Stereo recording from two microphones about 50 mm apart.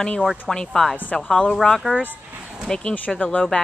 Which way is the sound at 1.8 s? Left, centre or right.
Left.